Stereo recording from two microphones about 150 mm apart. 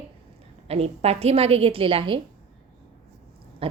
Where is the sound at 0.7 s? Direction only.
45° right (ahead or behind).